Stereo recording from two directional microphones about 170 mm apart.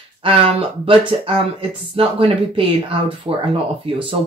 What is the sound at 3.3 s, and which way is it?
Speech, 20° right (ahead or behind).